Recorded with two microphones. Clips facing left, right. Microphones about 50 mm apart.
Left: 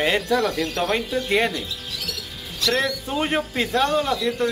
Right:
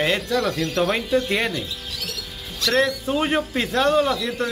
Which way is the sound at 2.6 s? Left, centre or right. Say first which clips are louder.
Right 3 dB; centre.